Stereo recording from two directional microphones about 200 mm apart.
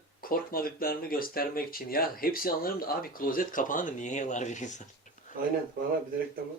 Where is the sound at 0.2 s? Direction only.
45° left (ahead or behind).